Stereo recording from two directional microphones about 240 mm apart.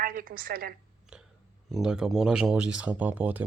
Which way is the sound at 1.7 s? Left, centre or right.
Centre.